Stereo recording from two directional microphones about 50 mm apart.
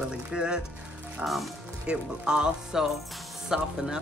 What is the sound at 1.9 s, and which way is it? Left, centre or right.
Speech, centre.